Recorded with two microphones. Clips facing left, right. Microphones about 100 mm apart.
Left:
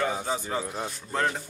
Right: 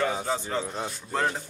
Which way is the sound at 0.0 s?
Centre (ahead or behind).